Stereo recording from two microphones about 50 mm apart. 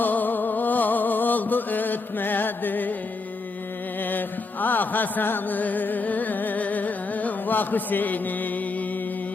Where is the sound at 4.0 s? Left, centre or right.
Left.